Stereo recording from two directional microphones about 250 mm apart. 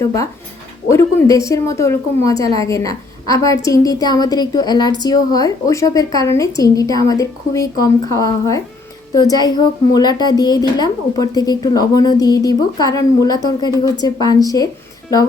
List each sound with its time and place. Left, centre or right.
0.0 s a woman's voice: centre